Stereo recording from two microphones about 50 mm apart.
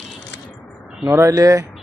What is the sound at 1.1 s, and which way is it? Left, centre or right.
Speech, right.